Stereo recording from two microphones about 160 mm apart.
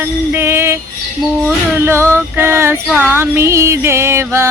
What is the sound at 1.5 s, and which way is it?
Female singing, 15° right (ahead or behind).